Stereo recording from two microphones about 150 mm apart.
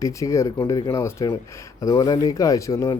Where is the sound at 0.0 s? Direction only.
20° left (ahead or behind).